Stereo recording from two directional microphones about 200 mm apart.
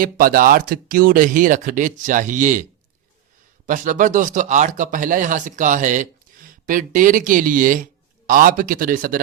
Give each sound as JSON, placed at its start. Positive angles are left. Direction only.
{"t": 0.0, "sound": "speech", "side_deg": -45}
{"t": 3.7, "sound": "speech", "side_deg": -40}